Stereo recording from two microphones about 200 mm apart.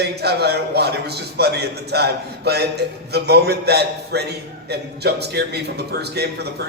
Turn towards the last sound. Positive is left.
turn(degrees=-55)  # may be behind; listen again after turning